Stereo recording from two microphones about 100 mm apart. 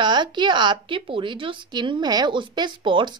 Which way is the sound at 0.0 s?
50° right (ahead or behind).